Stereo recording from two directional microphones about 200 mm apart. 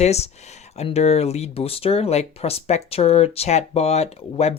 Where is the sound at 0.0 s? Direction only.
35° left (ahead or behind).